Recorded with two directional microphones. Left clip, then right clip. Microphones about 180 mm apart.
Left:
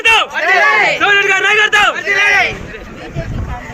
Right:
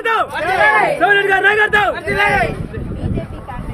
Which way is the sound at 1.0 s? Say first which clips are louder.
Left 1 dB; 35° right (ahead or behind).